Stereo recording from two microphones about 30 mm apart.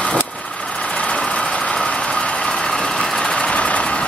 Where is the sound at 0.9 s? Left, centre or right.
Left.